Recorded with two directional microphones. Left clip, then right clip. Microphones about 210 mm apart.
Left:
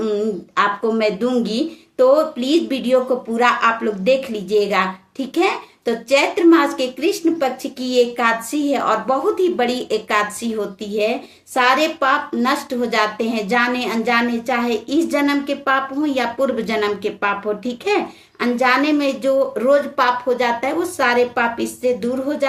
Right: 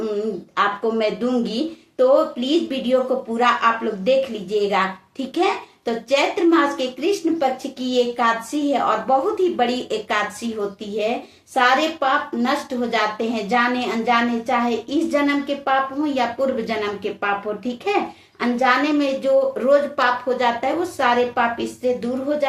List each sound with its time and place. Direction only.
0.5 s speech: 35° left (ahead or behind)
11.5 s speech: 35° left (ahead or behind)